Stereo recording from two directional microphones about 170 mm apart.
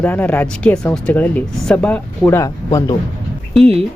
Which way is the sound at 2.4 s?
20° left (ahead or behind).